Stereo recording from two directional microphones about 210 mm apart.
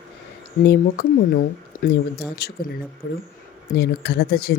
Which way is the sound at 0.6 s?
50° left (ahead or behind).